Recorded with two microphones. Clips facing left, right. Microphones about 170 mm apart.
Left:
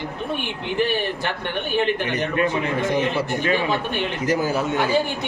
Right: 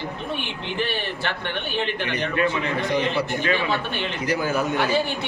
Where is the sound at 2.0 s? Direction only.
45° left (ahead or behind).